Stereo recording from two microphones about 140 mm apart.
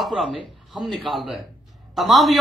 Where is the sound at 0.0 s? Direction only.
Centre (ahead or behind).